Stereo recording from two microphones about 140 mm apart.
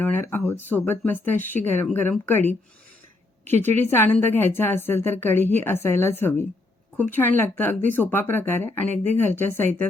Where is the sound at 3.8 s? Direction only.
15° left (ahead or behind).